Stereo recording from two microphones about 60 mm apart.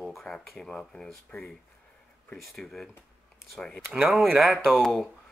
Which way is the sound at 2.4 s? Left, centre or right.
Centre.